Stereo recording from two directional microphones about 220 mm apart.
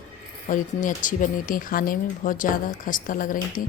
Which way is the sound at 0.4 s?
35° left (ahead or behind).